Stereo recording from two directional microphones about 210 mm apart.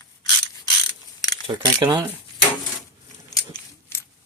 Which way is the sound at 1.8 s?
20° right (ahead or behind).